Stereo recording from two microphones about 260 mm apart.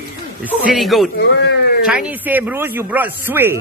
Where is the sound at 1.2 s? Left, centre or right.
Left.